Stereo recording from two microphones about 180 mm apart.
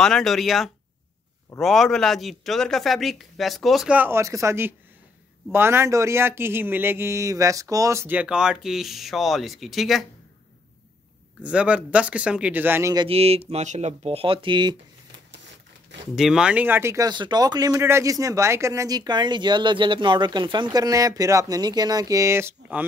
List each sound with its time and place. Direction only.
0.0 s speech: centre (ahead or behind)
11.4 s speech: 5° right (ahead or behind)
12.9 s speech: 30° right (ahead or behind)
16.2 s speech: 5° right (ahead or behind)